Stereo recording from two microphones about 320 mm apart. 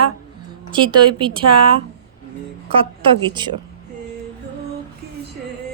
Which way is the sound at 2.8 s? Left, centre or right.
Centre.